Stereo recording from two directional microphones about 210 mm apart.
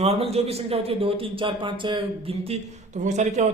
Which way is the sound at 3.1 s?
35° right (ahead or behind).